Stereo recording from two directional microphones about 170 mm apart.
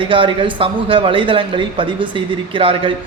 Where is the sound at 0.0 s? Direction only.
30° right (ahead or behind).